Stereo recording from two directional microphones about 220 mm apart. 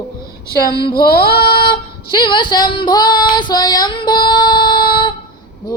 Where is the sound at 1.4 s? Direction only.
20° left (ahead or behind).